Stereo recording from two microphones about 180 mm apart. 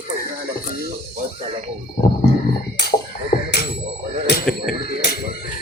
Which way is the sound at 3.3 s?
50° left (ahead or behind).